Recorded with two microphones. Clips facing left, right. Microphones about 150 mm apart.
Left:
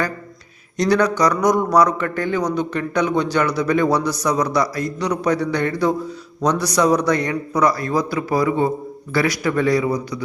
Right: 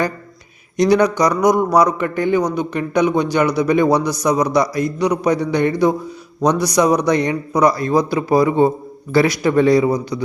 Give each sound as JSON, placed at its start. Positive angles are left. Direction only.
{"t": 0.8, "sound": "a man's voice", "side_deg": -15}